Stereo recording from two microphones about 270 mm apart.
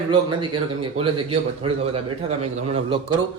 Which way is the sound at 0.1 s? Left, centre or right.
Centre.